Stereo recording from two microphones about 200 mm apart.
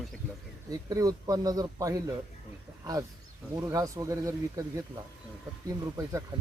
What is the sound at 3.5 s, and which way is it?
Speech, 15° right (ahead or behind).